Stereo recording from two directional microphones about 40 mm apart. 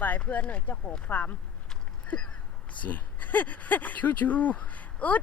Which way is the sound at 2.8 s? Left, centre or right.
Left.